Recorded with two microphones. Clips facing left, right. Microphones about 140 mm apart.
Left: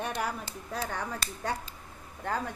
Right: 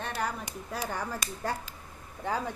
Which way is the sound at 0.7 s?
10° right (ahead or behind).